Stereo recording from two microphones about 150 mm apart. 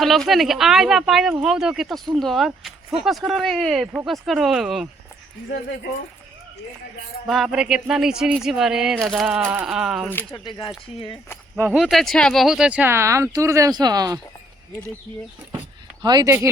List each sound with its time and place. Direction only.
0.0 s speech: centre (ahead or behind)
5.5 s speech: 90° left
7.3 s speech: 5° right (ahead or behind)
10.1 s speech: 15° left (ahead or behind)
10.4 s speech: 30° left (ahead or behind)
11.7 s speech: centre (ahead or behind); by 14.2 s 25° right (ahead or behind)
16.0 s speech: 30° right (ahead or behind)